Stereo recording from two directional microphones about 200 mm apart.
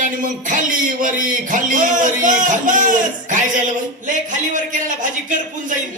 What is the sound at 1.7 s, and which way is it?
A man's voice, 40° right (ahead or behind).